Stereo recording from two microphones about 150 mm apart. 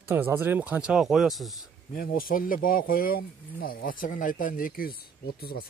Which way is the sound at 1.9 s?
70° left (ahead or behind).